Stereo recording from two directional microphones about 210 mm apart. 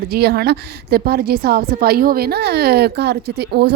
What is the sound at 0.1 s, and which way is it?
A woman's voice, 50° right (ahead or behind).